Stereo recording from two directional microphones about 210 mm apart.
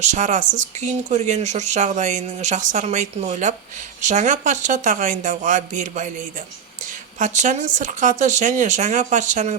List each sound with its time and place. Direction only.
0.0 s speech: 35° right (ahead or behind)